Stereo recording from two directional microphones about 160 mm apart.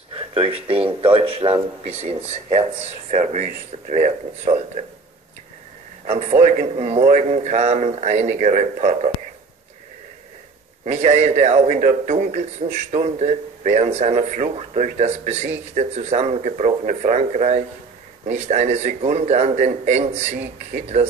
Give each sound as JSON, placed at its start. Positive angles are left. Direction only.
{"t": 0.1, "sound": "speech", "side_deg": -35}
{"t": 6.0, "sound": "speech", "side_deg": -45}
{"t": 10.9, "sound": "speech", "side_deg": -45}